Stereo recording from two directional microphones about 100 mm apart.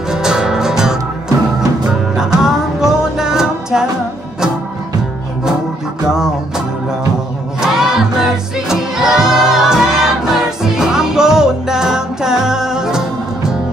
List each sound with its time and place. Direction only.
0.1 s music: 5° right (ahead or behind)
7.6 s music: 5° right (ahead or behind)